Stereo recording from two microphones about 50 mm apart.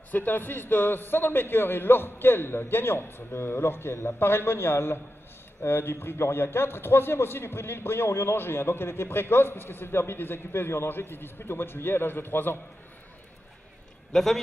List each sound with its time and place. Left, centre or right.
0.1 s a man's voice: left
14.1 s a man's voice: centre